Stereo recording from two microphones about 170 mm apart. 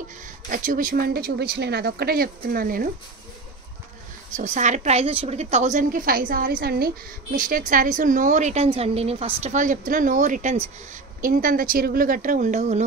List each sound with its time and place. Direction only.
0.5 s speech: 50° right (ahead or behind)
4.4 s speech: 45° right (ahead or behind); by 6.9 s 65° right (ahead or behind)
7.3 s speech: 50° right (ahead or behind)